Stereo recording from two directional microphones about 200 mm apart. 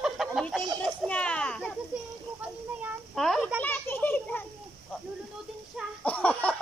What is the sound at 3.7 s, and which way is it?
Children playing, 10° left (ahead or behind).